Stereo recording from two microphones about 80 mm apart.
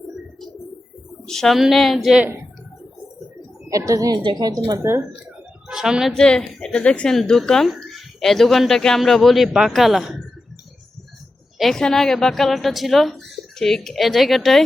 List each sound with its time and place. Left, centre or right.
1.3 s a woman's voice: centre
3.7 s a woman's voice: right
4.2 s a woman's voice: right
4.8 s speech: right
5.6 s a woman's voice: centre
6.1 s a woman's voice: centre
11.5 s a woman's voice: centre